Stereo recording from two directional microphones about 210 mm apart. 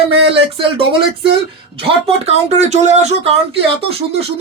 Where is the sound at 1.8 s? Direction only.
30° right (ahead or behind).